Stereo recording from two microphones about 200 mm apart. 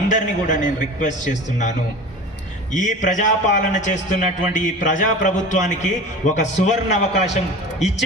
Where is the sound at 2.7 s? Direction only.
40° left (ahead or behind).